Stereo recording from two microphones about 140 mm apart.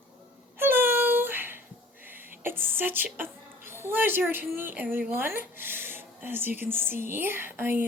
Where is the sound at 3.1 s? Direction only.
15° right (ahead or behind).